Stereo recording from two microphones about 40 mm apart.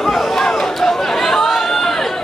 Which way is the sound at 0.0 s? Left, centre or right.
Centre.